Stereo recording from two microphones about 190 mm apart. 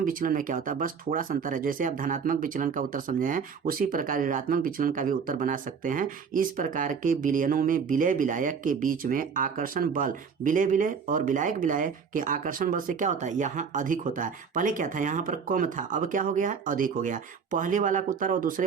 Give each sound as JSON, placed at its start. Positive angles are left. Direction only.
{"t": 0.0, "sound": "speech", "side_deg": -45}